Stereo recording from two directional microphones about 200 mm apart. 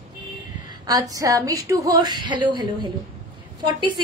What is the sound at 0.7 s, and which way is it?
A woman's voice, 15° right (ahead or behind).